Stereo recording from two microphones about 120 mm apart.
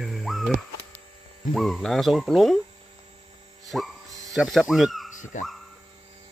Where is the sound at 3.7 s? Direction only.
5° right (ahead or behind).